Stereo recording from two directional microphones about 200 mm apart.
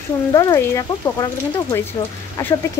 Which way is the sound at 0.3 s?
15° left (ahead or behind).